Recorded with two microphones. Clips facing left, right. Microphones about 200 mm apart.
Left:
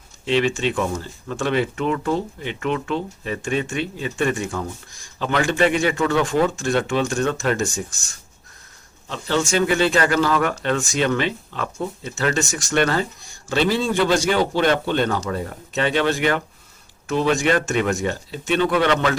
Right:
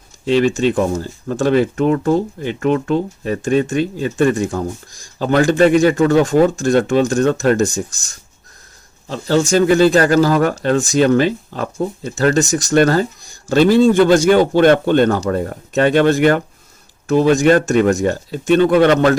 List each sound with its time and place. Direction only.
0.3 s speech: 40° right (ahead or behind)
9.0 s speech: 40° right (ahead or behind)